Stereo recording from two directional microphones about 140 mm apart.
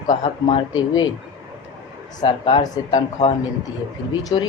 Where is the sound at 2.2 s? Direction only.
35° left (ahead or behind).